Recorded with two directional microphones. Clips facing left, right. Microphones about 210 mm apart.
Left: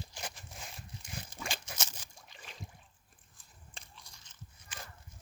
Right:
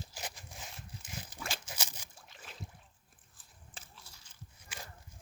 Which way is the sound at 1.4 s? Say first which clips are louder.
Left 1 dB; 5° right (ahead or behind).